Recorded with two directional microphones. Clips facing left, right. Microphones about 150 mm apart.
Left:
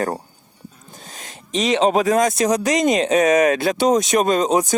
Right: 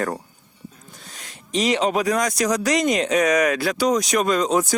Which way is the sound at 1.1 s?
25° left (ahead or behind).